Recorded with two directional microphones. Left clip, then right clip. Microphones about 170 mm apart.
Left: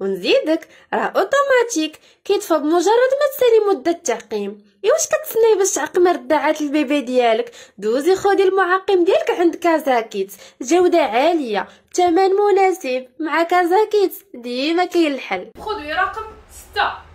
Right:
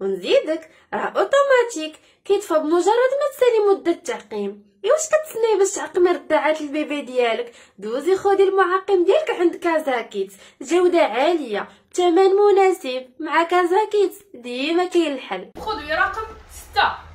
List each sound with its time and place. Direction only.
0.0 s a woman's voice: 45° left (ahead or behind); by 13.0 s 25° left (ahead or behind)
13.2 s a woman's voice: 40° left (ahead or behind)